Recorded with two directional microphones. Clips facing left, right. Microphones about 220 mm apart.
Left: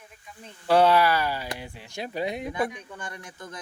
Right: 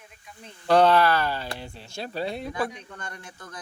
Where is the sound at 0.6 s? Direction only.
10° left (ahead or behind).